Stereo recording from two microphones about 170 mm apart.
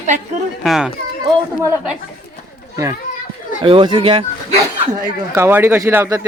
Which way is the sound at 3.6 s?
30° right (ahead or behind).